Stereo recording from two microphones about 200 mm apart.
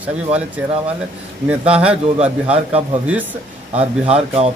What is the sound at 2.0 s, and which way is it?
Speech, 35° right (ahead or behind).